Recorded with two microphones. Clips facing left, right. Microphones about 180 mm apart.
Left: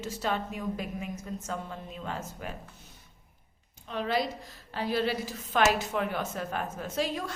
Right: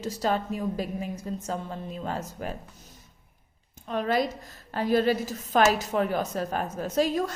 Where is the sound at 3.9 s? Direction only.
45° right (ahead or behind).